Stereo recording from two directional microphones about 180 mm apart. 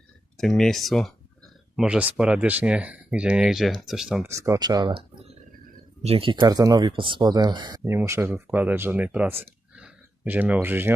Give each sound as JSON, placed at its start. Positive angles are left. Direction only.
{"t": 0.3, "sound": "speech", "side_deg": 0}
{"t": 4.2, "sound": "speech", "side_deg": -15}